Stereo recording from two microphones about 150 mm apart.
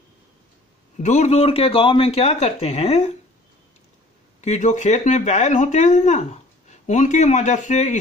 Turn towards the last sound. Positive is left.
turn(degrees=50)  # may be behind; listen again after turning